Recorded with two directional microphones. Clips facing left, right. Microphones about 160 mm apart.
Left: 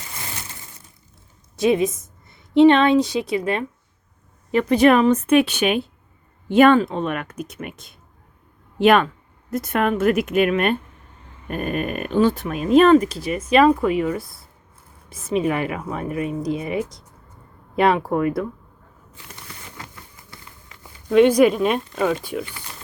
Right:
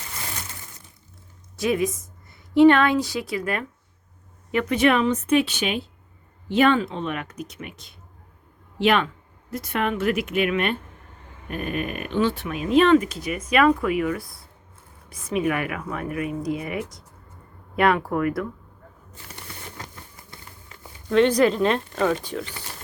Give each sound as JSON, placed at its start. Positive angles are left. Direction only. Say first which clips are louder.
{"t": 1.5, "sound": "a woman's voice", "louder": "left 5 dB", "side_deg": 20}
{"t": 4.5, "sound": "a woman's voice", "louder": "left 5 dB", "side_deg": 35}
{"t": 21.1, "sound": "speech", "louder": "left 4 dB", "side_deg": 10}